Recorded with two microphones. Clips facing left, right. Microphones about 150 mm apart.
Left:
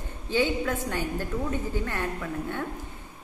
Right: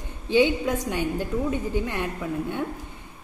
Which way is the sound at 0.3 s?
15° right (ahead or behind).